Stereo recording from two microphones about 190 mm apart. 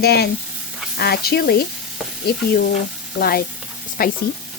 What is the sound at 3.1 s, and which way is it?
Stir, 55° left (ahead or behind).